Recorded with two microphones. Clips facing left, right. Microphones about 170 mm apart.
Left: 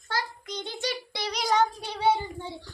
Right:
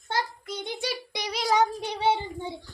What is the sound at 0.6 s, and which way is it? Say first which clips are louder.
Speech: even; 15° right (ahead or behind).